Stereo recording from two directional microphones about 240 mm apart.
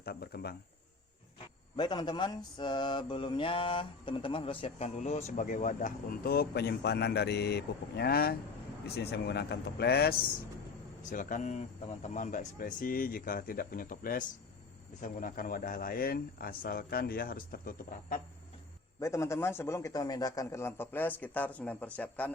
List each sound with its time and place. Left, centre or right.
0.0 s speech: left
1.7 s mantra: centre; by 8.4 s left
9.0 s speech: left
18.9 s a man's voice: centre